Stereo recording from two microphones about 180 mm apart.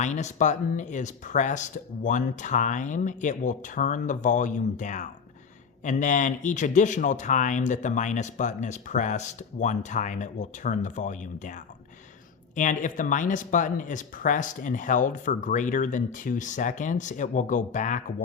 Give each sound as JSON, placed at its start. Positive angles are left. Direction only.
{"t": 0.0, "sound": "speech", "side_deg": 40}
{"t": 12.5, "sound": "speech", "side_deg": 45}